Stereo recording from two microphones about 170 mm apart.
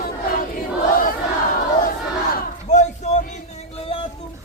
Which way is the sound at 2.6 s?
40° left (ahead or behind).